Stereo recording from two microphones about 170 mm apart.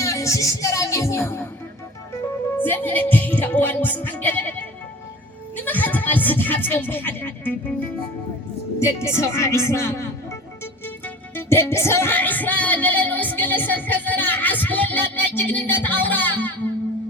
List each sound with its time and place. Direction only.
0.0 s music: 20° left (ahead or behind)
2.6 s music: 10° left (ahead or behind)
5.6 s music: 10° left (ahead or behind)
8.8 s a woman's voice: 15° left (ahead or behind)
10.8 s music: 10° left (ahead or behind)